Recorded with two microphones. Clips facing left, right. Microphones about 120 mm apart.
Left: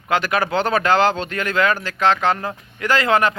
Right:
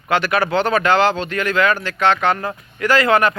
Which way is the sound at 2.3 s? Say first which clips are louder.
Right 2 dB; 25° left (ahead or behind).